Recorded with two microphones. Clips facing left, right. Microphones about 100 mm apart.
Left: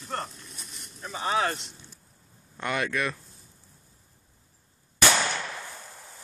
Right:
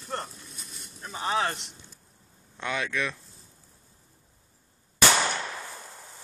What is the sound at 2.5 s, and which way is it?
Speech, 5° left (ahead or behind).